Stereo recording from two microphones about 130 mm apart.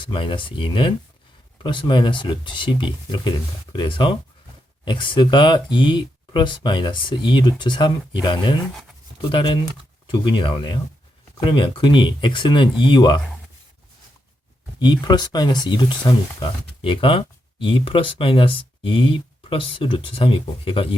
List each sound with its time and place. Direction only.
0.0 s speech: 40° left (ahead or behind)
14.8 s speech: 35° left (ahead or behind)